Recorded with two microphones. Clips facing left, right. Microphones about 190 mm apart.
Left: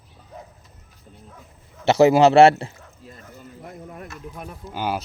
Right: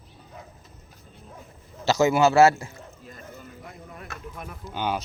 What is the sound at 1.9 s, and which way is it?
Speech, 30° left (ahead or behind).